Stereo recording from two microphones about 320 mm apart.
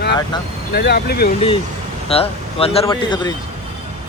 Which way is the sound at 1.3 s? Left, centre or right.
Centre.